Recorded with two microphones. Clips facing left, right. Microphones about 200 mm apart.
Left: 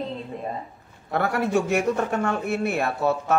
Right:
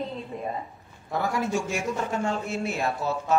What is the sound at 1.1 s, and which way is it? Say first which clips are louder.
A man's voice: left 4 dB; 65° left (ahead or behind).